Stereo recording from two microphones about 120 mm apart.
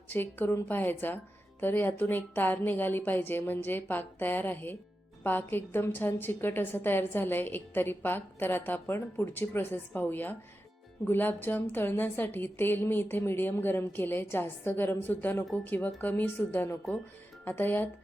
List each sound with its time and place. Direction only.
0.1 s a woman's voice: 15° left (ahead or behind)